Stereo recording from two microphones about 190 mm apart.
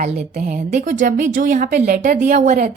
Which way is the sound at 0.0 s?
40° right (ahead or behind).